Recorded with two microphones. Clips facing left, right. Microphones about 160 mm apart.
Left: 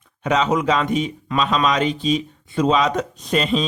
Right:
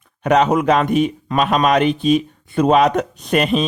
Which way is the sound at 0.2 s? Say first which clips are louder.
Right 4 dB; 55° right (ahead or behind).